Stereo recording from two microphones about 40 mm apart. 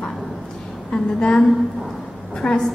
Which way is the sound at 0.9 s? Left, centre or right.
Centre.